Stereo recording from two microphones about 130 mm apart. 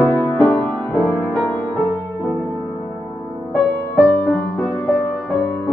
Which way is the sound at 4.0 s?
Centre (ahead or behind).